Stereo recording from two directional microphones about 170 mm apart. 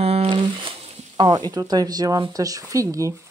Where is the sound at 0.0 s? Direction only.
35° right (ahead or behind).